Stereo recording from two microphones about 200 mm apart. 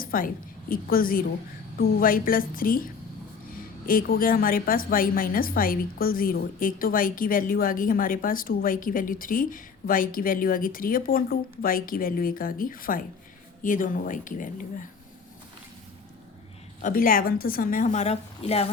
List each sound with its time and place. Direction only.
0.0 s a sound: 45° left (ahead or behind)
0.7 s a woman's voice: 45° left (ahead or behind)
16.8 s a woman's voice: 45° left (ahead or behind)